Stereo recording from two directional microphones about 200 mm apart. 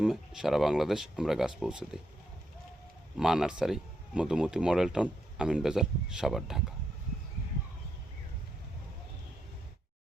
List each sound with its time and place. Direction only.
0.0 s speech: centre (ahead or behind)
3.2 s speech: 5° right (ahead or behind)